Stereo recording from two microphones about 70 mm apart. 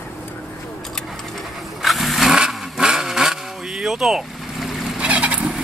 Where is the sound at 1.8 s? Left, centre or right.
Centre.